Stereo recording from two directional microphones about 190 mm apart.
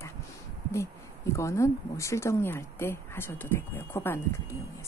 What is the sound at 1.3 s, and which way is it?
Speech, 15° left (ahead or behind).